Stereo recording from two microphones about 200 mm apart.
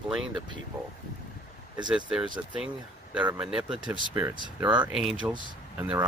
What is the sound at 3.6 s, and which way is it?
Speech, 25° right (ahead or behind).